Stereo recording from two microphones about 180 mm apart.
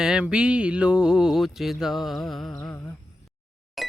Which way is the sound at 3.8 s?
Centre (ahead or behind).